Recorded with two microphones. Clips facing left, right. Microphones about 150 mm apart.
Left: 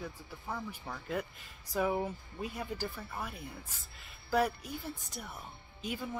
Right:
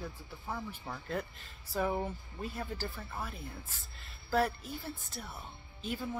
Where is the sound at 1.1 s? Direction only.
10° left (ahead or behind).